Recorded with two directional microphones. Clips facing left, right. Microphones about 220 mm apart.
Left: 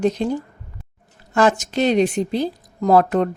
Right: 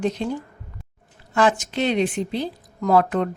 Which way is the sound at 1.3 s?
40° left (ahead or behind).